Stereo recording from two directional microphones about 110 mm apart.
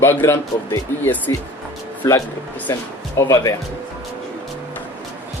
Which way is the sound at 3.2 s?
30° left (ahead or behind).